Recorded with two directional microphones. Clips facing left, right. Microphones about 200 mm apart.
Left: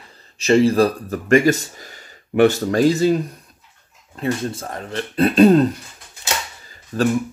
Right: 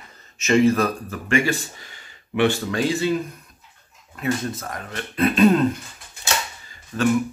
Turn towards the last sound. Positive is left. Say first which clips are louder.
# left 2 dB
turn(degrees=40)  # may be behind; listen again after turning